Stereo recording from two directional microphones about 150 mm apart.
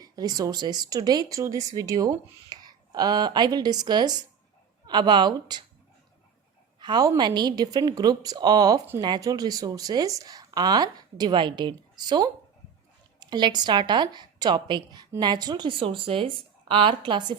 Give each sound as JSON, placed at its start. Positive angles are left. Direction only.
{"t": 0.0, "sound": "speech", "side_deg": -25}
{"t": 6.7, "sound": "a woman's voice", "side_deg": -30}